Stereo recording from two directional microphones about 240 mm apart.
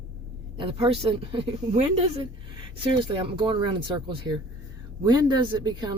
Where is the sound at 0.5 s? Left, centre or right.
Right.